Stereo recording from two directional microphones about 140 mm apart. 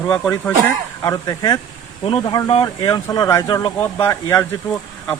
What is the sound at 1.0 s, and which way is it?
Speech, 25° left (ahead or behind).